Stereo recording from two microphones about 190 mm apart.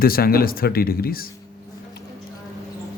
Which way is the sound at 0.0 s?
50° left (ahead or behind).